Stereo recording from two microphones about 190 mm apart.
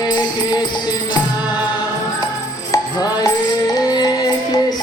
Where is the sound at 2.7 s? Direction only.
20° left (ahead or behind).